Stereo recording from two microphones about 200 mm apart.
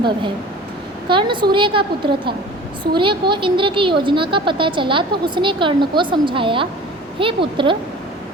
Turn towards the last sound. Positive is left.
turn(degrees=-25)  # may be behind; listen again after turning